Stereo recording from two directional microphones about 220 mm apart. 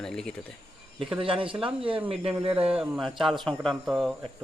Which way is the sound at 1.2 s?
25° right (ahead or behind).